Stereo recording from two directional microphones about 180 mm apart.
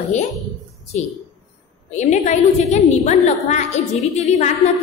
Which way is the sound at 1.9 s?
40° left (ahead or behind).